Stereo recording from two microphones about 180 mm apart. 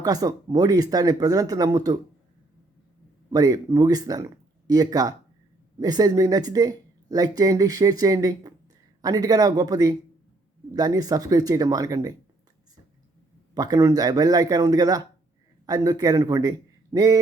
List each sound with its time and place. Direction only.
0.0 s speech: 20° right (ahead or behind)
3.2 s speech: 20° right (ahead or behind)
13.5 s a man's voice: 20° right (ahead or behind)